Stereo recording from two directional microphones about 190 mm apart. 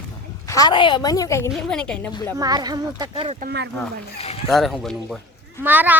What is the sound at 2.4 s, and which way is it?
Speech, 20° right (ahead or behind).